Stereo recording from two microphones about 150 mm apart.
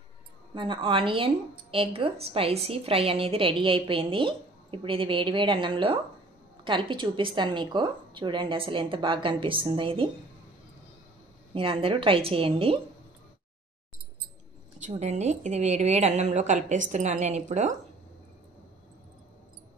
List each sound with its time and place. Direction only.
0.6 s a woman's voice: 35° right (ahead or behind)
11.5 s a woman's voice: 40° right (ahead or behind)
14.8 s a woman's voice: 50° right (ahead or behind)